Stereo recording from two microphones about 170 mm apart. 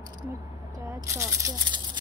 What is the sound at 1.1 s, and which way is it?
Speech, 25° right (ahead or behind).